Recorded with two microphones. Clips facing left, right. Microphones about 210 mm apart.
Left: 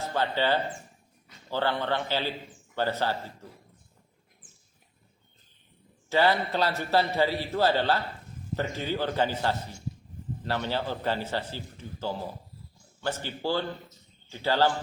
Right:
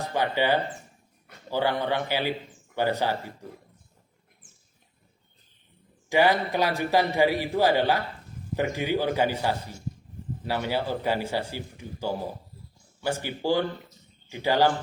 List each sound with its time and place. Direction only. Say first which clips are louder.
0.0 s a man's voice: right 2 dB; 15° right (ahead or behind)
6.1 s a man's voice: right 2 dB; 15° right (ahead or behind)